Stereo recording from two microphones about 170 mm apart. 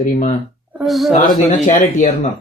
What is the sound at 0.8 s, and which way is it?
Speech, centre (ahead or behind).